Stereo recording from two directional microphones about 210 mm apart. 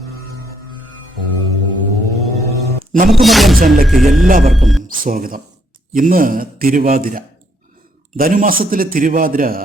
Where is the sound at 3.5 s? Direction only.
40° right (ahead or behind).